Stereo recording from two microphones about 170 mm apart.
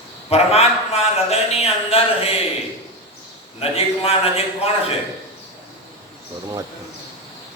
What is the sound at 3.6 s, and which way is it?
A man's voice, 35° left (ahead or behind).